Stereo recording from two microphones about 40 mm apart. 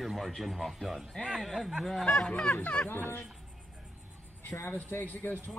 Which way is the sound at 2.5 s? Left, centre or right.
Centre.